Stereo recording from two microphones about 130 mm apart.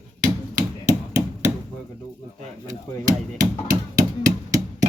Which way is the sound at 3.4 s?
85° right.